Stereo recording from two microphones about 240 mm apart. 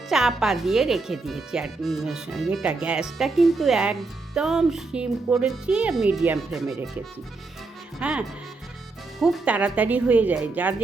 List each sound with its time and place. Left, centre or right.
0.1 s speech: centre
9.2 s speech: centre